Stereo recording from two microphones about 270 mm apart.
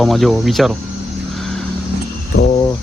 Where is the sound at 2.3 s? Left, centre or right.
Left.